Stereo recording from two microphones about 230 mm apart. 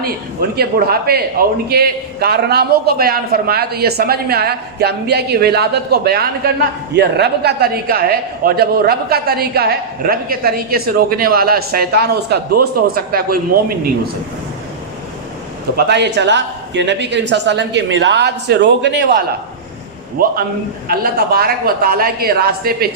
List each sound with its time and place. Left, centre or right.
0.5 s a man's voice: right
15.7 s a man's voice: right
20.2 s a woman's voice: right